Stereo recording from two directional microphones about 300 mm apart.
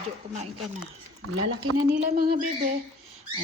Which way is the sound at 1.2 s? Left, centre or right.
Right.